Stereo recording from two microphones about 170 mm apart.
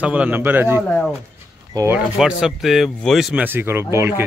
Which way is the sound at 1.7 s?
15° right (ahead or behind).